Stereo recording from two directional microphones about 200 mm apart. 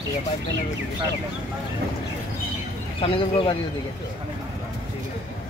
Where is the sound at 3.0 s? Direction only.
25° left (ahead or behind).